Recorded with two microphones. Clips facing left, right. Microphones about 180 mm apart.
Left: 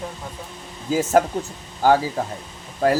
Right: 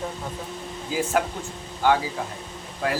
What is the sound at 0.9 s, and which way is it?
A man's voice, 45° left (ahead or behind).